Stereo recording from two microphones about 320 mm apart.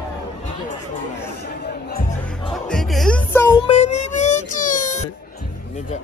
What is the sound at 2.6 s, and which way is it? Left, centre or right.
Music, centre.